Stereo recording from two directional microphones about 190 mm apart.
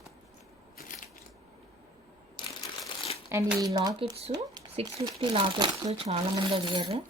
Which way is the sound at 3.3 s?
15° right (ahead or behind).